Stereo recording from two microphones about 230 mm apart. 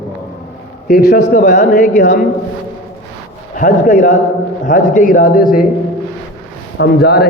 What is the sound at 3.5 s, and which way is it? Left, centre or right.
A man's voice, left.